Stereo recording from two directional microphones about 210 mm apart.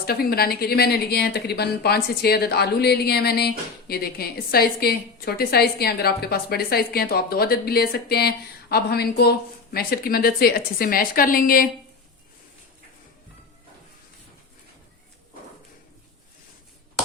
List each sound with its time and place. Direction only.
0.0 s a woman's voice: 45° left (ahead or behind)